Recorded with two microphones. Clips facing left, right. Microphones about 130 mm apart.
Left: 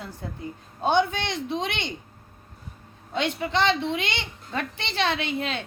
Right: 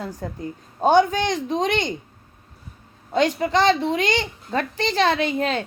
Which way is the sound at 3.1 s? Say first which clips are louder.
Right 6 dB; 40° right (ahead or behind).